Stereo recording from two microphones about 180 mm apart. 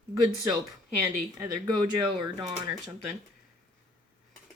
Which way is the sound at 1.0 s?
20° right (ahead or behind).